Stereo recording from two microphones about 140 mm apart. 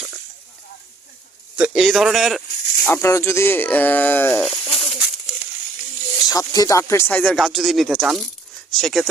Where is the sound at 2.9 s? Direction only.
20° left (ahead or behind).